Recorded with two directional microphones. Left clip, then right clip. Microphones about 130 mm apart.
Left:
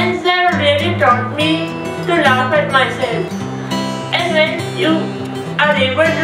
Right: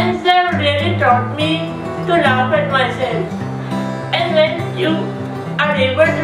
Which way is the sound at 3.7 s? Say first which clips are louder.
Left 1 dB; 5° left (ahead or behind).